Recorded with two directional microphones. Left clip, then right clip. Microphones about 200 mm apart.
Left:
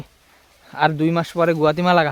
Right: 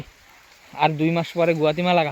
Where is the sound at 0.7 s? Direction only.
25° left (ahead or behind).